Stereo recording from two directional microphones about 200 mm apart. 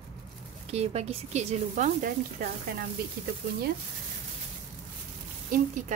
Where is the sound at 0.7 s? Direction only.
30° right (ahead or behind).